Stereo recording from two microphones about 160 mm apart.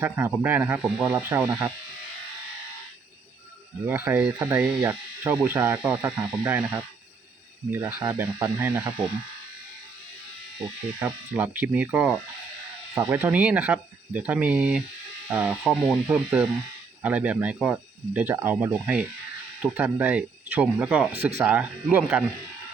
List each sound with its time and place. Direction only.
0.0 s speech: 10° right (ahead or behind)
3.8 s speech: 10° right (ahead or behind)
11.0 s speech: 10° right (ahead or behind)